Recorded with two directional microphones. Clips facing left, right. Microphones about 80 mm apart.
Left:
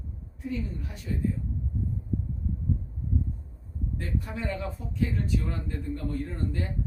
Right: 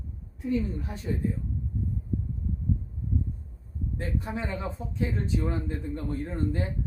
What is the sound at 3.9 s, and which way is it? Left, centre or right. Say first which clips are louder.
Speech: right 2 dB; right.